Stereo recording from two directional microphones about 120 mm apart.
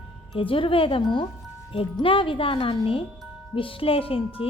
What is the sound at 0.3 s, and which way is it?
Speech, 45° left (ahead or behind).